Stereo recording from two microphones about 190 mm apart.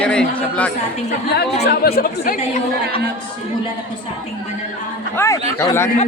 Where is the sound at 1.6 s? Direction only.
55° left (ahead or behind).